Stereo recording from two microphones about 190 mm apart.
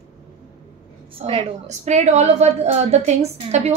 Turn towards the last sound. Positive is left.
turn(degrees=-35)  # may be behind; listen again after turning